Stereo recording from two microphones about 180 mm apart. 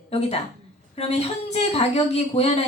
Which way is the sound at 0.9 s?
35° left (ahead or behind).